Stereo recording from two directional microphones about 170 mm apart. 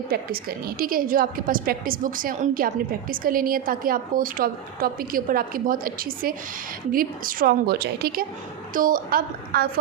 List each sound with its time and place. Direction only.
0.1 s a woman's voice: 65° right (ahead or behind)
8.7 s a woman's voice: 55° right (ahead or behind)